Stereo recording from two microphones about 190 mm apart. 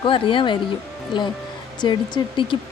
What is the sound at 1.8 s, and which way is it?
Speech, 25° left (ahead or behind).